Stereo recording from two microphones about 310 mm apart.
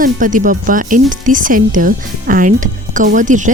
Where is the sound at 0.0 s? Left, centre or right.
Right.